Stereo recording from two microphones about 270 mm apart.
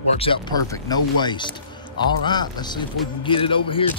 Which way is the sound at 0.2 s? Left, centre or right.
Centre.